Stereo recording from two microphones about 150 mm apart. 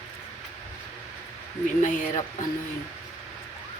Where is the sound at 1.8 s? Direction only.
60° left (ahead or behind).